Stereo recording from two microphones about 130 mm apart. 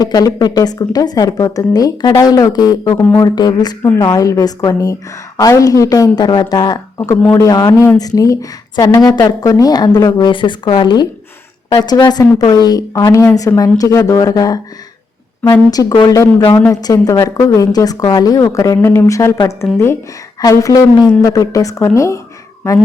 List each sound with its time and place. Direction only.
0.0 s speech: 30° left (ahead or behind)
7.2 s a man's voice: 15° left (ahead or behind); by 14.6 s 30° left (ahead or behind)
15.7 s speech: 30° left (ahead or behind)